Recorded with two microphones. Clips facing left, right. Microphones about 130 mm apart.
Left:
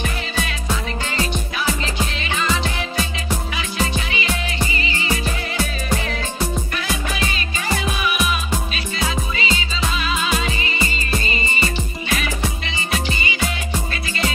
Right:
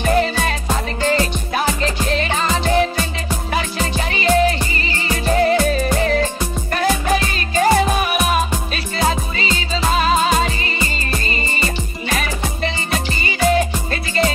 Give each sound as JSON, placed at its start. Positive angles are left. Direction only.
{"t": 0.0, "sound": "music", "side_deg": -45}